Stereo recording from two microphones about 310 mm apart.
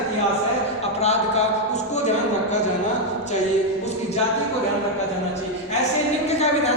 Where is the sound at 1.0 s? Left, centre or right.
Left.